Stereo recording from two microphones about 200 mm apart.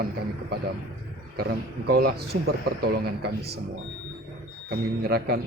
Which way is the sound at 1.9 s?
50° right (ahead or behind).